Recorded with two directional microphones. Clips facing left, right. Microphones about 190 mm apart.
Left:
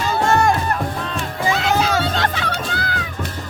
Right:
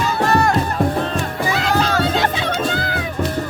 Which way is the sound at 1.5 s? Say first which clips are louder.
Right 1 dB; 5° left (ahead or behind).